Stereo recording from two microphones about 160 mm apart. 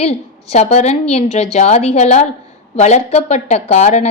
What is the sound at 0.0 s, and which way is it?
A woman's voice, 40° left (ahead or behind).